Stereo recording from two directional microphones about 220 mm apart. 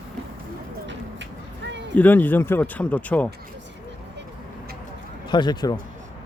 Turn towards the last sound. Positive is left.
turn(degrees=20)  # may be behind; listen again after turning